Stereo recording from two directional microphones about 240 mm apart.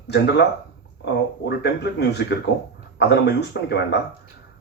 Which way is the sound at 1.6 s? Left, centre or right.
Left.